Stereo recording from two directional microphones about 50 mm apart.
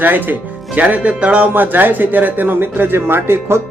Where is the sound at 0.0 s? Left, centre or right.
Right.